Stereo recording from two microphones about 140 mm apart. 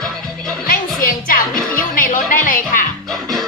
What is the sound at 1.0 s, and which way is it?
Music, 90° left.